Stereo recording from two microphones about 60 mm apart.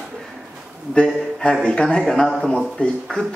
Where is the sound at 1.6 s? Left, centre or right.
Centre.